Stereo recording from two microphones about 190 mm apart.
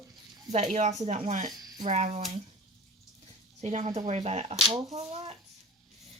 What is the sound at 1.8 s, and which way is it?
Speech, 40° right (ahead or behind).